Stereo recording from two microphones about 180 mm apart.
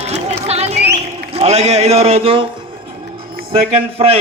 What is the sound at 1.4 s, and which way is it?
A man's voice, 35° right (ahead or behind).